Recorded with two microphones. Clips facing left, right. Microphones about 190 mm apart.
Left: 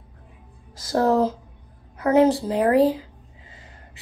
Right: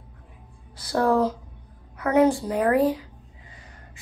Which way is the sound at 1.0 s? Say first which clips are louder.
Left 1 dB; 25° left (ahead or behind).